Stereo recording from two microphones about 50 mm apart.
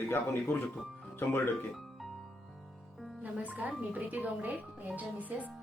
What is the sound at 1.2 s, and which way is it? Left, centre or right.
Speech, left.